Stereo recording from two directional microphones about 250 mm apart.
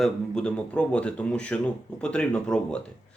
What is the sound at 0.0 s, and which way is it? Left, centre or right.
Speech, centre.